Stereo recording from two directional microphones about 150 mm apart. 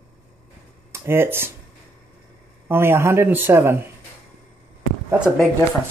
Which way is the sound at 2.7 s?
15° right (ahead or behind).